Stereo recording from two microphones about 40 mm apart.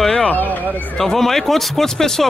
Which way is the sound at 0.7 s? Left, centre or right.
Right.